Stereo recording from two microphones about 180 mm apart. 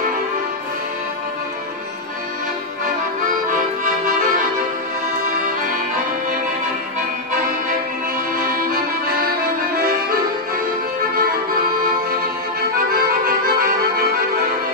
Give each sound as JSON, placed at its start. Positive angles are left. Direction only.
{"t": 3.5, "sound": "music", "side_deg": -45}
{"t": 8.4, "sound": "accordion", "side_deg": -50}